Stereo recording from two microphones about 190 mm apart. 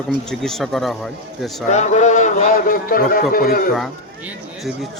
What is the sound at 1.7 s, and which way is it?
A man's voice, 40° left (ahead or behind).